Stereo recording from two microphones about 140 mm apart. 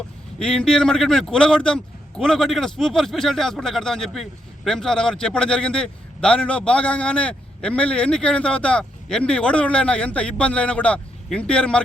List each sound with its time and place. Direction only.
0.3 s speech: 5° left (ahead or behind)